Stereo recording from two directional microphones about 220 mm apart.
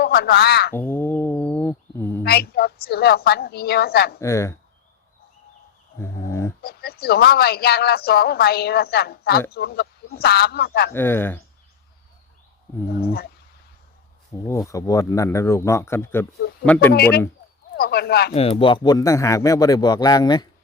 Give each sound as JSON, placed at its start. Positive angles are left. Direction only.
{"t": 0.0, "sound": "a sound", "side_deg": 45}
{"t": 0.8, "sound": "a sound", "side_deg": 10}
{"t": 2.2, "sound": "a woman's voice", "side_deg": 45}
{"t": 4.2, "sound": "a man's voice", "side_deg": 10}
{"t": 6.0, "sound": "a sound", "side_deg": 10}
{"t": 6.6, "sound": "a woman's voice", "side_deg": 45}
{"t": 10.9, "sound": "a man's voice", "side_deg": 10}
{"t": 13.0, "sound": "a woman's voice", "side_deg": 45}
{"t": 14.4, "sound": "a man's voice", "side_deg": 15}
{"t": 16.9, "sound": "a woman's voice", "side_deg": 45}
{"t": 18.3, "sound": "a man's voice", "side_deg": 25}